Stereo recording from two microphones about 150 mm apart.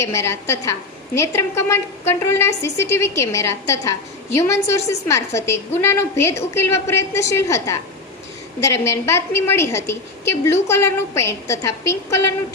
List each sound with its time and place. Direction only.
0.0 s a woman's voice: 20° left (ahead or behind)